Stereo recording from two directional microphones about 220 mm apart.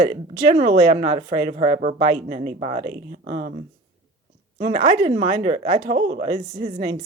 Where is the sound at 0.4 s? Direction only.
40° right (ahead or behind).